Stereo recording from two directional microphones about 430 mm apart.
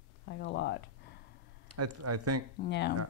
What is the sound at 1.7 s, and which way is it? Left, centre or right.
Speech, right.